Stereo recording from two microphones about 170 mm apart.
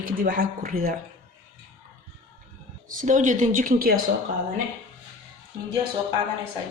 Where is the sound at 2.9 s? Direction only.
50° right (ahead or behind).